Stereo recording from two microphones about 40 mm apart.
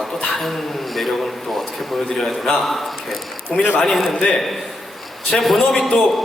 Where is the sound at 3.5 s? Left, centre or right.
Centre.